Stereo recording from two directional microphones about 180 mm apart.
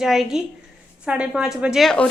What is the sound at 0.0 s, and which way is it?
A woman's voice, centre (ahead or behind).